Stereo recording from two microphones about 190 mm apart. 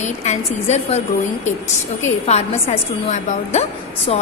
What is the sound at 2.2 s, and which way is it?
A woman's voice, 35° left (ahead or behind).